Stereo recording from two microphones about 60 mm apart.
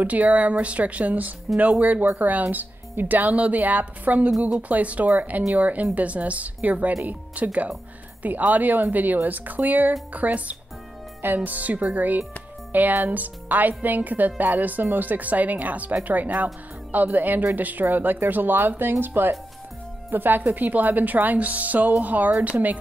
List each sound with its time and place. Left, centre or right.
0.0 s speech: right